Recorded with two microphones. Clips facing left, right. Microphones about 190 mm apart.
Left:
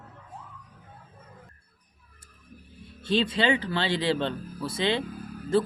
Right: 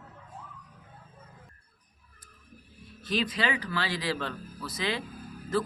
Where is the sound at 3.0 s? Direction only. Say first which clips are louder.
Left 5 dB; 30° left (ahead or behind).